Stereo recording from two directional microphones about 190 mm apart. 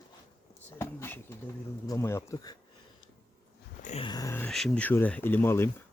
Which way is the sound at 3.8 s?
35° left (ahead or behind).